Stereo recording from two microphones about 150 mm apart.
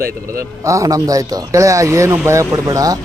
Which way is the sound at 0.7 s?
20° right (ahead or behind).